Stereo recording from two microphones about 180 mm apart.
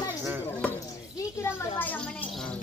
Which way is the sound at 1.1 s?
15° left (ahead or behind).